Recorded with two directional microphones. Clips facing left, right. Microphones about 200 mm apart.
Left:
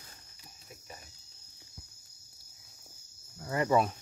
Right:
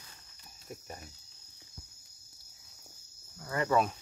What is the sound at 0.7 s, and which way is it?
Cricket, 45° right (ahead or behind).